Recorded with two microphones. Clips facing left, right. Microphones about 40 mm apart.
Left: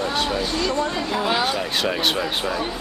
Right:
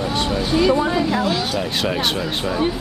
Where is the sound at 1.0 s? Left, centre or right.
Centre.